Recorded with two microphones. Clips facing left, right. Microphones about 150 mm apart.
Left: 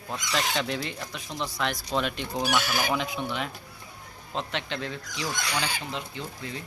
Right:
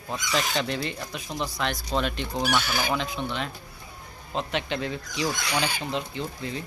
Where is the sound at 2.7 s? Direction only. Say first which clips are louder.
Even; 10° left (ahead or behind).